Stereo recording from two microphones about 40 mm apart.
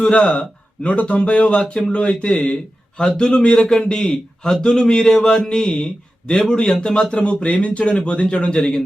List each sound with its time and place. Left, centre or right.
0.0 s a man's voice: left